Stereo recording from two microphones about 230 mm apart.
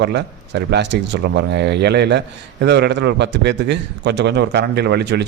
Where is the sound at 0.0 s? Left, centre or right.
Right.